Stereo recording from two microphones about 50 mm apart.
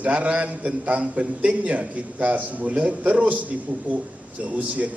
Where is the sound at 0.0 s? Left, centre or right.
Right.